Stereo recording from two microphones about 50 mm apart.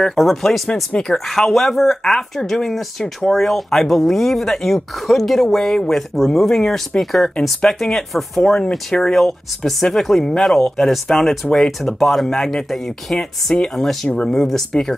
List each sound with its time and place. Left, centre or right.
0.1 s speech: centre
8.4 s speech: centre
14.0 s speech: left
14.3 s speech: centre